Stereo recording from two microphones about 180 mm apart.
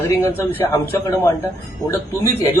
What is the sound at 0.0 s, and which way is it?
A man's voice, 15° left (ahead or behind).